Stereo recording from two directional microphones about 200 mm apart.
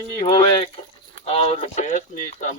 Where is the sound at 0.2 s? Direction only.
20° left (ahead or behind).